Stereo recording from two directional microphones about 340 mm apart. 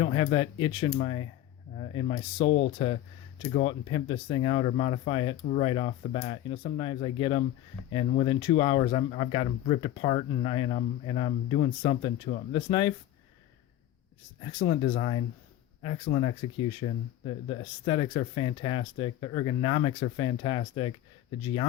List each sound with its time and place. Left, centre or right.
0.0 s speech: centre
14.7 s speech: centre